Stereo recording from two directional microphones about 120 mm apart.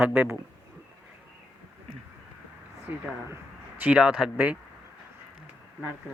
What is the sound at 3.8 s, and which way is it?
Speech, 10° right (ahead or behind).